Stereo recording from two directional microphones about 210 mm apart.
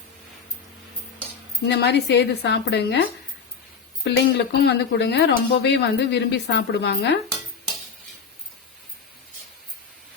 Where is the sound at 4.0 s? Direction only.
55° left (ahead or behind).